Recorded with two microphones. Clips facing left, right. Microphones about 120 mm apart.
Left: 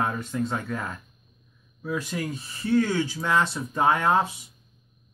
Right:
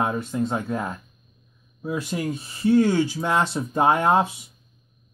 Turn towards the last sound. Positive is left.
turn(degrees=-30)  # may be behind; listen again after turning